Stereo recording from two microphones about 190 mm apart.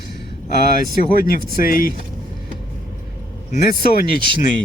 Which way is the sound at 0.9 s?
50° left (ahead or behind).